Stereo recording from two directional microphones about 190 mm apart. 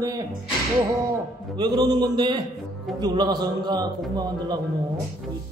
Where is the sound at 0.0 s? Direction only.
20° right (ahead or behind).